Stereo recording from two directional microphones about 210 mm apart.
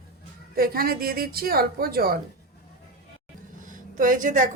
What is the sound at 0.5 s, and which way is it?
Speech, 45° right (ahead or behind).